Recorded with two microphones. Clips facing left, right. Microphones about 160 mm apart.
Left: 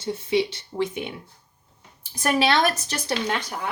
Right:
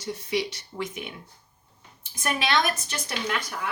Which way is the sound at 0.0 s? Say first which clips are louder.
Left 5 dB; 25° left (ahead or behind).